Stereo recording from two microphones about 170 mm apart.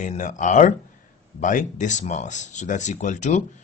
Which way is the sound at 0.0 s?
45° left (ahead or behind).